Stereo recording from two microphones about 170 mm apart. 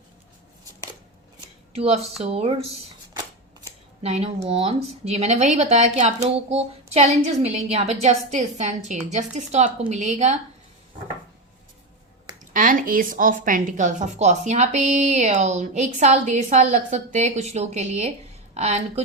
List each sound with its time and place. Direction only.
1.7 s speech: 35° right (ahead or behind)
4.0 s a woman's voice: 40° right (ahead or behind)
12.5 s a woman's voice: 55° right (ahead or behind)